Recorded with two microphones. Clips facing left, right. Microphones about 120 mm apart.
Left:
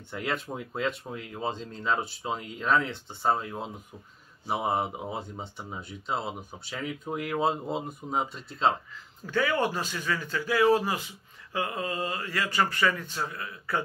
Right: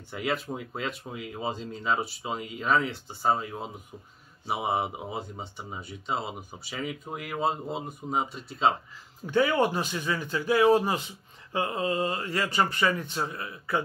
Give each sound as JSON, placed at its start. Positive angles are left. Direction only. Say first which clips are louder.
{"t": 0.1, "sound": "speech", "louder": "right 2 dB", "side_deg": -5}
{"t": 9.2, "sound": "speech", "louder": "right 3 dB", "side_deg": -20}